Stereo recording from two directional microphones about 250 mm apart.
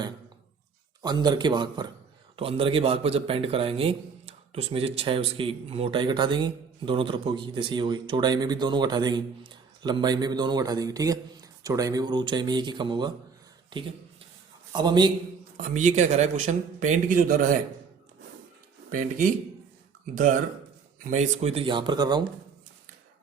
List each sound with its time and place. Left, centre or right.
1.0 s a man's voice: centre
15.5 s a man's voice: right
18.9 s a man's voice: right; by 22.2 s centre